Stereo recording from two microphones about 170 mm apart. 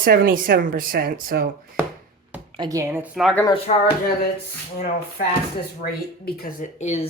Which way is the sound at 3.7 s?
45° left (ahead or behind).